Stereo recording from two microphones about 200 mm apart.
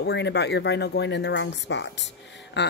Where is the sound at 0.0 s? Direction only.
60° left (ahead or behind).